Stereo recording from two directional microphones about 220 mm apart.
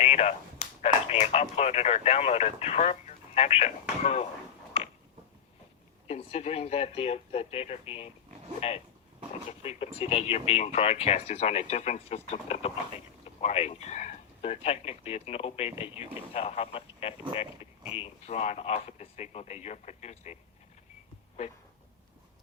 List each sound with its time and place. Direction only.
0.0 s a sound: 30° left (ahead or behind)
0.8 s speech: 30° left (ahead or behind)
6.1 s speech: 30° left (ahead or behind)